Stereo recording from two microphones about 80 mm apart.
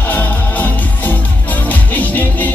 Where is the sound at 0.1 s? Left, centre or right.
Left.